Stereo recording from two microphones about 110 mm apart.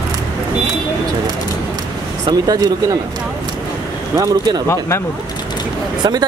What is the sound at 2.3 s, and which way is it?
Speech, 35° right (ahead or behind).